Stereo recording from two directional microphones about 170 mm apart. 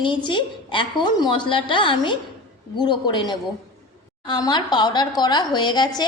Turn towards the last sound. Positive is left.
turn(degrees=25)  # may be behind; listen again after turning